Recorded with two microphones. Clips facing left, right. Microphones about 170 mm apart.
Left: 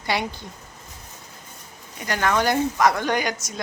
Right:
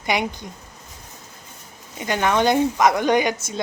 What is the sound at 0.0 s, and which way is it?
Speech, 15° right (ahead or behind).